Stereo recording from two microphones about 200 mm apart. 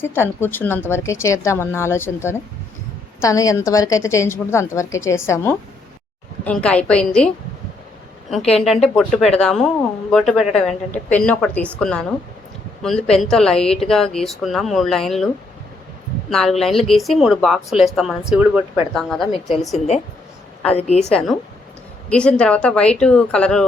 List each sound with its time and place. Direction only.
0.0 s a woman's voice: 10° left (ahead or behind)
8.5 s a woman's voice: centre (ahead or behind)
16.3 s a woman's voice: centre (ahead or behind)
20.7 s a woman's voice: 35° left (ahead or behind)
21.1 s a woman's voice: 5° left (ahead or behind)